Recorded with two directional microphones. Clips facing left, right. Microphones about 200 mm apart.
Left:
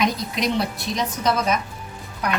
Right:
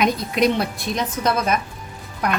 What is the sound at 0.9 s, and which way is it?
Speech, 55° right (ahead or behind).